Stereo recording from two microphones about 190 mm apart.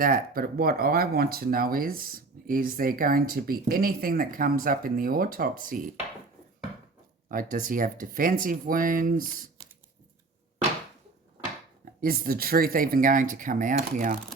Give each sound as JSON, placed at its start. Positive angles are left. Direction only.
{"t": 0.0, "sound": "speech", "side_deg": -50}
{"t": 7.3, "sound": "speech", "side_deg": -45}
{"t": 11.9, "sound": "speech", "side_deg": -50}